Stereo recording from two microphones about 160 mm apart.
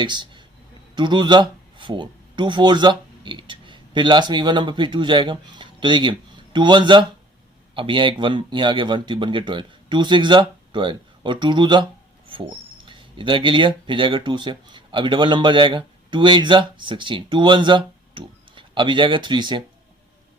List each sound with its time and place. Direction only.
0.0 s a man's voice: 30° right (ahead or behind)